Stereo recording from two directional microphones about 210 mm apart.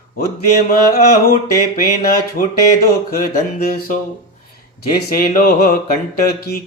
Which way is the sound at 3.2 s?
40° left (ahead or behind).